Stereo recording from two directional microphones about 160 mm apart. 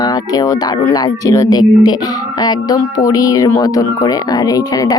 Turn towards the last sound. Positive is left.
turn(degrees=20)  # may be behind; listen again after turning